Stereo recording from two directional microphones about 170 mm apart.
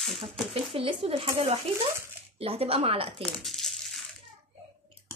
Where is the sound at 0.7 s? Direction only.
35° right (ahead or behind).